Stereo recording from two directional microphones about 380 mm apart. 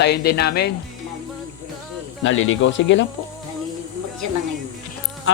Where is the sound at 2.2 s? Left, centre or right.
Left.